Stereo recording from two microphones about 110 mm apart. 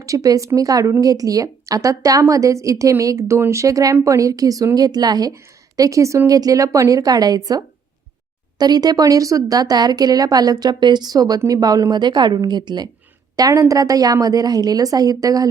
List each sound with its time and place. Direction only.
0.0 s a woman's voice: 30° right (ahead or behind)